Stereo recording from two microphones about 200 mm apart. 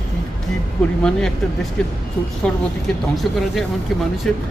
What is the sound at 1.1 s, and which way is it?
Speech, 5° left (ahead or behind).